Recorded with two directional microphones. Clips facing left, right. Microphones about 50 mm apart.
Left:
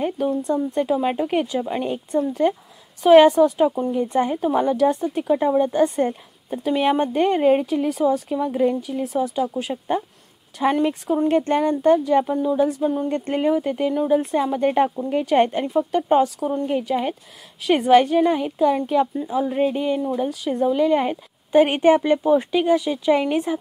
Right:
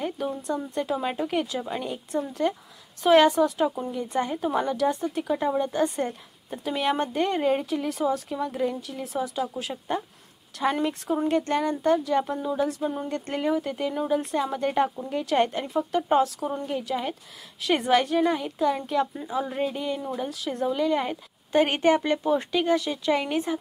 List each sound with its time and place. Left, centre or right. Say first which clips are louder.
0.4 s speech: left 7 dB; centre
3.0 s speech: left 6 dB; centre
3.9 s speech: left 7 dB; left
7.7 s speech: left 6 dB; centre
9.0 s speech: left 5 dB; centre
13.1 s speech: left 6 dB; left
15.7 s speech: left 5 dB; centre